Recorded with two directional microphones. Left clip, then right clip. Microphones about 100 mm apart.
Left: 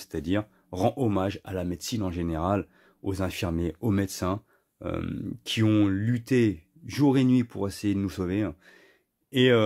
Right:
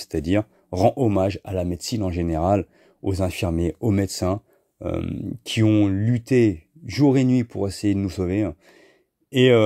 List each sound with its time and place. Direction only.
0.0 s speech: 60° right (ahead or behind)
0.8 s speech: 40° right (ahead or behind)
5.0 s speech: 30° right (ahead or behind)
5.7 s speech: 20° right (ahead or behind); by 9.6 s 45° right (ahead or behind)